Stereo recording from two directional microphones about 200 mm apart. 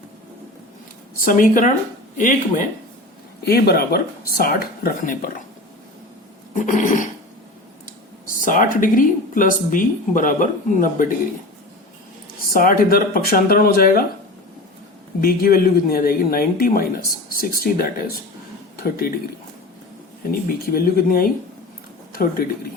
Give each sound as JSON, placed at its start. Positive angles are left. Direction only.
{"t": 1.2, "sound": "speech", "side_deg": 40}
{"t": 3.4, "sound": "speech", "side_deg": 50}
{"t": 6.5, "sound": "a sound", "side_deg": 40}
{"t": 7.9, "sound": "speech", "side_deg": 40}
{"t": 12.5, "sound": "speech", "side_deg": 45}
{"t": 15.2, "sound": "a man's voice", "side_deg": 45}
{"t": 20.7, "sound": "speech", "side_deg": 45}